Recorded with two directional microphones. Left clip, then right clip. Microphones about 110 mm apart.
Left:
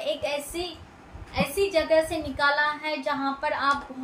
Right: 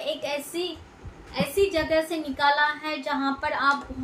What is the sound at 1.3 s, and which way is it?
A woman's voice, 15° right (ahead or behind).